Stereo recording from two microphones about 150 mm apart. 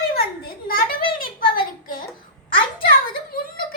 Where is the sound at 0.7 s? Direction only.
70° left (ahead or behind).